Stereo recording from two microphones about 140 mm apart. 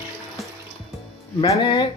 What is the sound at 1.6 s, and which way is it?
Speech, 35° left (ahead or behind).